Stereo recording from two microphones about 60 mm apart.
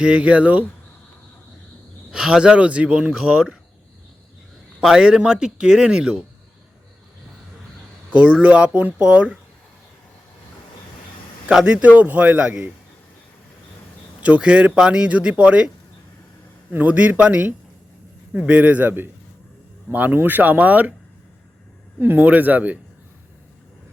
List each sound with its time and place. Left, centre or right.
0.0 s speech: centre
2.0 s speech: centre
4.9 s speech: centre
8.1 s speech: right
11.6 s speech: right
14.2 s speech: right
16.7 s speech: right
22.0 s speech: right